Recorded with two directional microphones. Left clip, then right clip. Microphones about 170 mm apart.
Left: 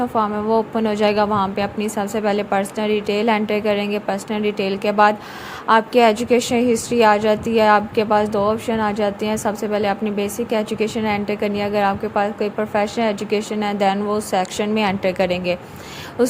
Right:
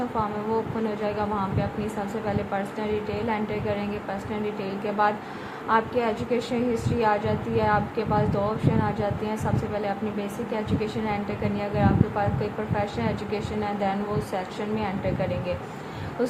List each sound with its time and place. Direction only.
0.2 s a woman's voice: 45° left (ahead or behind)